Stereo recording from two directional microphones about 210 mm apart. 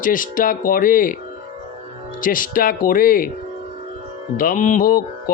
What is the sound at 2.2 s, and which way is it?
A man's voice, 40° left (ahead or behind).